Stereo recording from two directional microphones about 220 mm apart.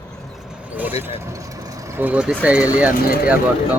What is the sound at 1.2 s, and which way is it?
Vehicle, 15° right (ahead or behind).